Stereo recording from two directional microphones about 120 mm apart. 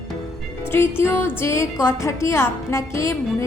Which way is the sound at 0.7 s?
20° left (ahead or behind).